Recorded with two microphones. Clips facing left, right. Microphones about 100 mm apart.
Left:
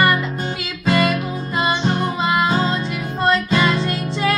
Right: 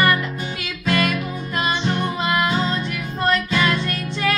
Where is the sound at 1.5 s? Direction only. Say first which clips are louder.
Left 3 dB; 25° left (ahead or behind).